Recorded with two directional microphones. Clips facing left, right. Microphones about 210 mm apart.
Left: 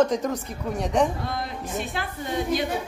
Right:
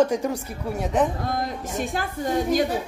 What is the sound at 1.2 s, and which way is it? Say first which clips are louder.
A woman's voice: right 3 dB; 45° right (ahead or behind).